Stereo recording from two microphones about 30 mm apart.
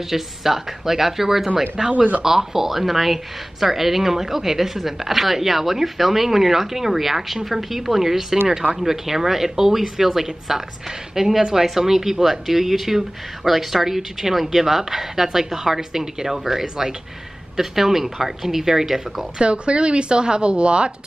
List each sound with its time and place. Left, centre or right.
0.1 s speech: centre
1.9 s speech: right
2.2 s speech: centre
19.3 s speech: right